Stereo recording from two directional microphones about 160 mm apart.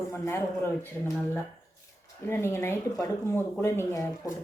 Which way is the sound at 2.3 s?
15° left (ahead or behind).